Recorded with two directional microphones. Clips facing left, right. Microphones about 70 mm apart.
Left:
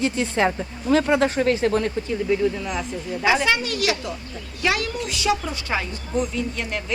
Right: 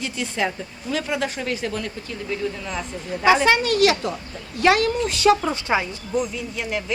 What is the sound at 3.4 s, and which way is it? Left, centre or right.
A woman's voice, right.